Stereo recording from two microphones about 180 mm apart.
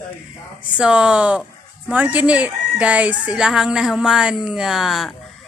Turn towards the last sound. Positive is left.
turn(degrees=0)  # may be behind; listen again after turning